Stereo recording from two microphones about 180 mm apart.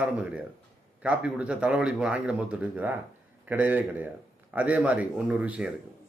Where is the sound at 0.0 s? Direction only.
5° right (ahead or behind).